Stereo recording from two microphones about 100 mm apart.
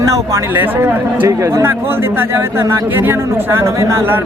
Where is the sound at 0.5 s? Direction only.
20° right (ahead or behind).